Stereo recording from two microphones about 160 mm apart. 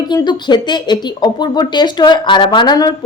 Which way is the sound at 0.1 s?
25° left (ahead or behind).